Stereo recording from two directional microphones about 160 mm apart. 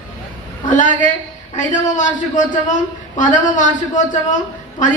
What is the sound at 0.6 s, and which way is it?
A man's voice, 55° left (ahead or behind).